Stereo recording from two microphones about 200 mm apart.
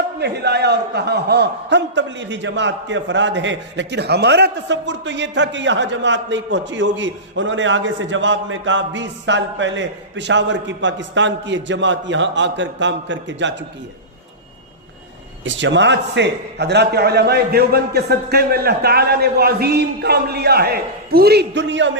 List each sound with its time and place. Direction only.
0.2 s a man's voice: 55° right (ahead or behind)
15.4 s a man's voice: 65° right (ahead or behind)